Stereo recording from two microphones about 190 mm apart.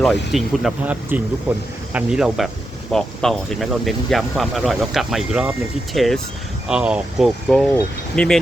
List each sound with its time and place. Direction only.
0.0 s speech: centre (ahead or behind)